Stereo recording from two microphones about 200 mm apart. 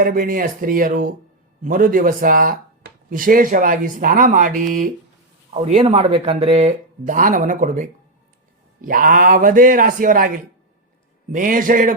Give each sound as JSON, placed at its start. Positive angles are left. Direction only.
{"t": 0.0, "sound": "speech", "side_deg": -45}